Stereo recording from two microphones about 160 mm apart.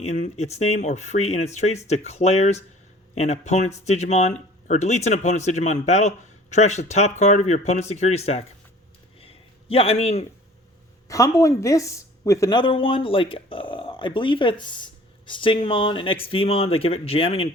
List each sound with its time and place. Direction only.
0.0 s speech: 45° left (ahead or behind)
9.2 s a sound: 35° left (ahead or behind)
11.1 s speech: 20° left (ahead or behind); by 17.5 s 35° left (ahead or behind)